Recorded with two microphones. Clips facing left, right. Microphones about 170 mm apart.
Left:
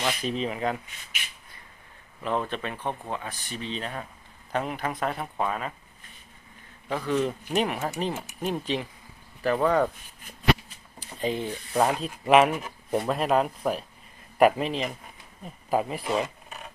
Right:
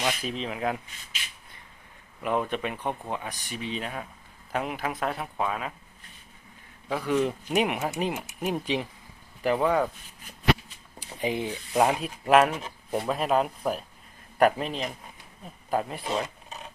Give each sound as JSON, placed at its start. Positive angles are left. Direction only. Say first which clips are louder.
{"t": 0.0, "sound": "speech", "louder": "left 2 dB", "side_deg": -5}
{"t": 2.2, "sound": "speech", "louder": "right 1 dB", "side_deg": -10}
{"t": 6.9, "sound": "speech", "louder": "right 1 dB", "side_deg": -10}
{"t": 11.2, "sound": "speech", "louder": "even", "side_deg": -15}
{"t": 12.2, "sound": "speech", "louder": "left 1 dB", "side_deg": 0}